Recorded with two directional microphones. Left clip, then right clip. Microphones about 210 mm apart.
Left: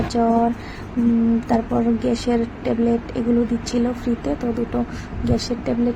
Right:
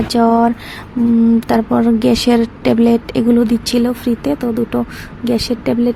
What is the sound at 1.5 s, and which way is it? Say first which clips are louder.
Speech: right 6 dB; 45° right (ahead or behind).